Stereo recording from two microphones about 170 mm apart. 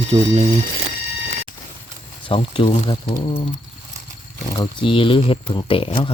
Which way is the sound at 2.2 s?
30° left (ahead or behind).